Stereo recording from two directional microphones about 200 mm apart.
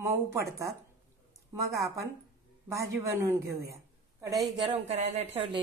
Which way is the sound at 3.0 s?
15° right (ahead or behind).